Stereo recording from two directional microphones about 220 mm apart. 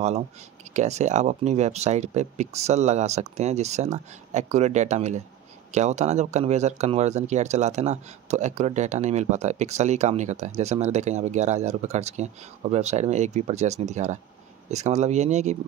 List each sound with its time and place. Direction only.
0.7 s speech: 30° right (ahead or behind)